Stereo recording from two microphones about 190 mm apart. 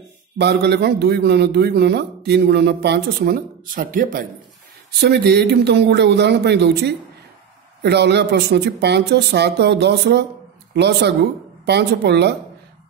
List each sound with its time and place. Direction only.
0.4 s a man's voice: 60° right (ahead or behind)
5.0 s a man's voice: 60° right (ahead or behind)